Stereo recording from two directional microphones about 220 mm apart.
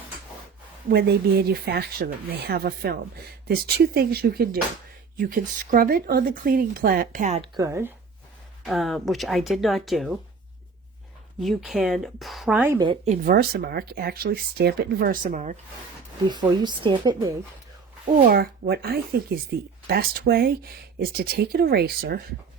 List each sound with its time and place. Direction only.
0.9 s speech: 45° right (ahead or behind)
7.5 s speech: 15° right (ahead or behind)
8.6 s speech: centre (ahead or behind)
11.3 s speech: centre (ahead or behind)
13.2 s speech: 45° right (ahead or behind)
16.3 s a woman's voice: 20° right (ahead or behind)
18.3 s speech: 45° right (ahead or behind)